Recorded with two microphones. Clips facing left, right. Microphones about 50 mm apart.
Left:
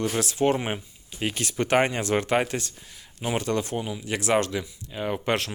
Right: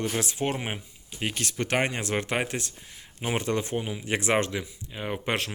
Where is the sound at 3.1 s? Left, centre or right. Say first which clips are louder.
Left 1 dB; right.